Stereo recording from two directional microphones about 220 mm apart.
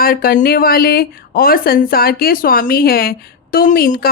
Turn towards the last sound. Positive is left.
turn(degrees=40)  # may be behind; listen again after turning